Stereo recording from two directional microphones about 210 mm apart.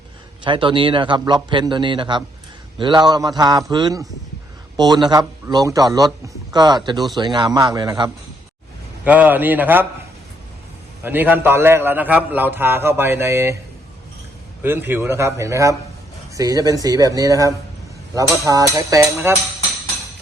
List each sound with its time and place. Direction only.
0.4 s a man's voice: 25° right (ahead or behind)
9.0 s a man's voice: 5° right (ahead or behind)
11.0 s a man's voice: 10° right (ahead or behind)
14.6 s a man's voice: 10° right (ahead or behind)